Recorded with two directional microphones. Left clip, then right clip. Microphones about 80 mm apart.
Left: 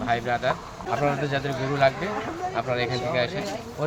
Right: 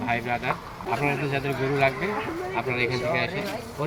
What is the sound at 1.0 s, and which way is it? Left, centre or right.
Speech, left.